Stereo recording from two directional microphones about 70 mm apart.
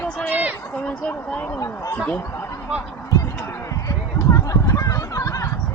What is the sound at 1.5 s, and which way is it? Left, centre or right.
Speech, left.